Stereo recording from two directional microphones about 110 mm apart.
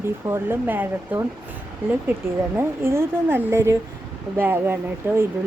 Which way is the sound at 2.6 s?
25° right (ahead or behind).